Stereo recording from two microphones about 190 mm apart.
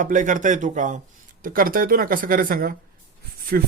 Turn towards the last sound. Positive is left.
turn(degrees=-50)  # may be behind; listen again after turning